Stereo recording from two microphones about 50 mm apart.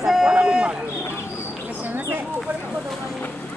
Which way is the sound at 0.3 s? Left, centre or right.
Centre.